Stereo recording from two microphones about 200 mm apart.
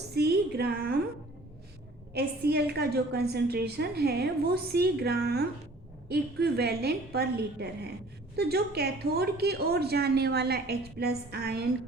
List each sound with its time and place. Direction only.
0.1 s a woman's voice: 55° right (ahead or behind)
2.1 s a woman's voice: 50° right (ahead or behind)